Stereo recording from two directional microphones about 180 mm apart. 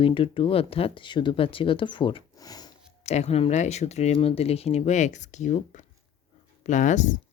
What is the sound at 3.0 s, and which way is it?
Speech, 35° left (ahead or behind).